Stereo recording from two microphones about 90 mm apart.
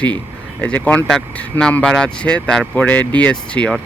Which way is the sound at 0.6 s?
15° left (ahead or behind).